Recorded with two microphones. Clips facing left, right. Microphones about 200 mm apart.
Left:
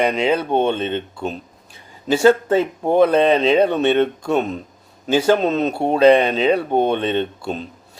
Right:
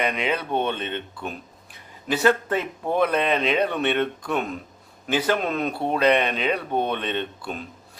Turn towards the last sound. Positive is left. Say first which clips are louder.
# left 7 dB
turn(degrees=25)  # may be behind; listen again after turning